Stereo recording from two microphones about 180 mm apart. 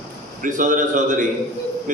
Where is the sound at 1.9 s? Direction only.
45° right (ahead or behind).